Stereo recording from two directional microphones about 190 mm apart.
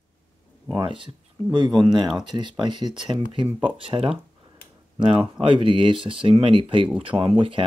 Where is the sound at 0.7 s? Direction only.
25° right (ahead or behind).